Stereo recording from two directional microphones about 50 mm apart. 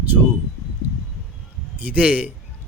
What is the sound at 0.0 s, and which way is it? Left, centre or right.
Speech, right.